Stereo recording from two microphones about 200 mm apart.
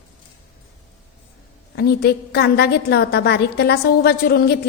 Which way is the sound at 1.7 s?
55° left (ahead or behind).